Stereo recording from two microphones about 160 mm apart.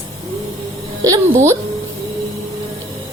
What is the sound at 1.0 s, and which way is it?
Speech, 20° right (ahead or behind).